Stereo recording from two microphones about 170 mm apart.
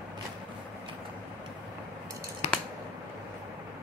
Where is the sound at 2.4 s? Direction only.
40° left (ahead or behind).